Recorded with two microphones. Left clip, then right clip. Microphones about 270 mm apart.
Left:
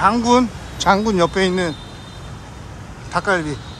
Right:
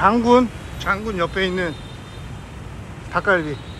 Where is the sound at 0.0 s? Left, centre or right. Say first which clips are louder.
Even; centre.